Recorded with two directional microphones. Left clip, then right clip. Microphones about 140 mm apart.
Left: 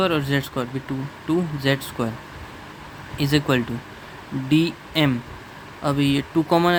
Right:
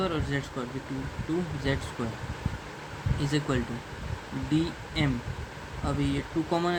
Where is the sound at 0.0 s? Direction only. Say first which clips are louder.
Left 9 dB; 65° left (ahead or behind).